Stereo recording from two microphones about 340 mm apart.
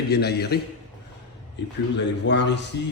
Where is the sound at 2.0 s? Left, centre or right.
Left.